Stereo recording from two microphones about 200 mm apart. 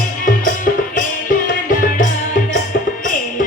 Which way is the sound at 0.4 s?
45° left (ahead or behind).